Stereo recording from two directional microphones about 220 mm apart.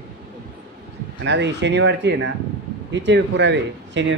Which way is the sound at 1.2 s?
50° right (ahead or behind).